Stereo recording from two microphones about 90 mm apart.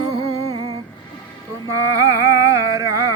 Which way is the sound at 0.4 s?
45° right (ahead or behind).